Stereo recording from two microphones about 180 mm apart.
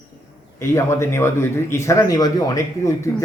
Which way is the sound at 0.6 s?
15° left (ahead or behind).